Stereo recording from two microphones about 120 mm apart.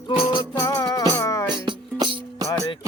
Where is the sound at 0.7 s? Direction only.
30° left (ahead or behind).